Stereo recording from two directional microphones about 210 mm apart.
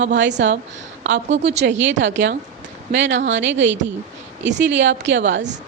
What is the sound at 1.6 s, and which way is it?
Speech, 60° right (ahead or behind).